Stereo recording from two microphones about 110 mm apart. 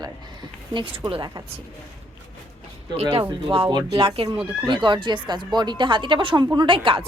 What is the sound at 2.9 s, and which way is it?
Speech, 55° right (ahead or behind).